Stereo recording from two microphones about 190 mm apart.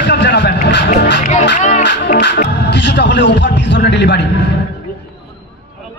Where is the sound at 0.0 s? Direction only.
65° left (ahead or behind).